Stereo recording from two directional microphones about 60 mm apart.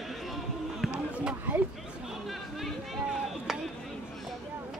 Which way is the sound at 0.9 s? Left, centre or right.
Centre.